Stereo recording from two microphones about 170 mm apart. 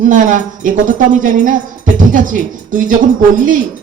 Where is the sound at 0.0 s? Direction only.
50° right (ahead or behind).